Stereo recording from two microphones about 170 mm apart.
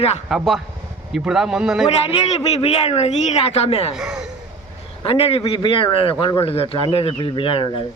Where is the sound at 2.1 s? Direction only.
40° left (ahead or behind).